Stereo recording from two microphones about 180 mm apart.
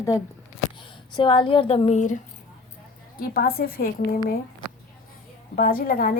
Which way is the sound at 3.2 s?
55° left (ahead or behind).